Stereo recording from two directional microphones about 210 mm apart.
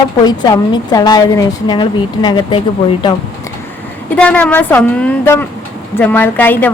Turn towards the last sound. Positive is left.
turn(degrees=10)  # may be behind; listen again after turning